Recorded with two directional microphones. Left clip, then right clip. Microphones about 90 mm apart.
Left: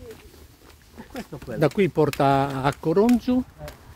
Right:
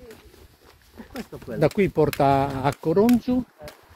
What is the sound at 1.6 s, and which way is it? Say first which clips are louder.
Speech: even; 15° left (ahead or behind).